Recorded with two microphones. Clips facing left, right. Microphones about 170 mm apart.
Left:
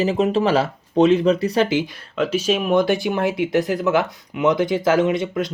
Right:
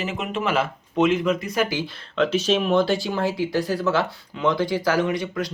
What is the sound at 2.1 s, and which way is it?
Speech, 10° left (ahead or behind).